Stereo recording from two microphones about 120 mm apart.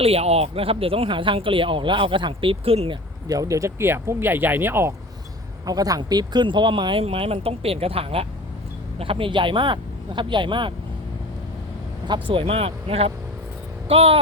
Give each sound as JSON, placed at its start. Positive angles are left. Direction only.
{"t": 0.0, "sound": "speech", "side_deg": -55}
{"t": 3.2, "sound": "speech", "side_deg": -30}
{"t": 5.6, "sound": "speech", "side_deg": -30}
{"t": 7.0, "sound": "speech", "side_deg": -55}
{"t": 12.0, "sound": "speech", "side_deg": -45}